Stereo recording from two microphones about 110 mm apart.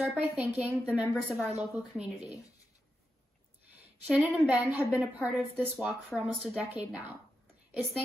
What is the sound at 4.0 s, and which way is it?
A woman's voice, 15° right (ahead or behind).